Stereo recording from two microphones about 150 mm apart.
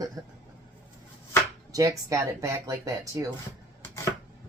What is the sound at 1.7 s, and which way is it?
Speech, 25° right (ahead or behind).